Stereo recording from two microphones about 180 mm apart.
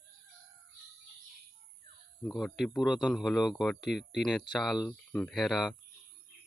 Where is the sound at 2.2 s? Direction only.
Centre (ahead or behind).